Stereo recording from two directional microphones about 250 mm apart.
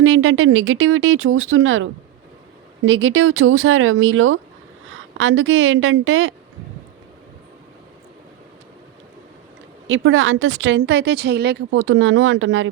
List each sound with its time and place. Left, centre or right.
0.0 s a woman's voice: right
9.8 s a woman's voice: right